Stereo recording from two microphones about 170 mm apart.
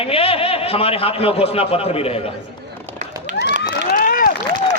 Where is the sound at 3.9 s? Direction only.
55° left (ahead or behind).